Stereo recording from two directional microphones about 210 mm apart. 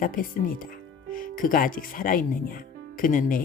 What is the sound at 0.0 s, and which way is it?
Speech, 40° left (ahead or behind).